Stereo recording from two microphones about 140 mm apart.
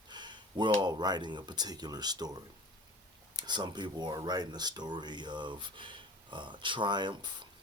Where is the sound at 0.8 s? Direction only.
30° right (ahead or behind).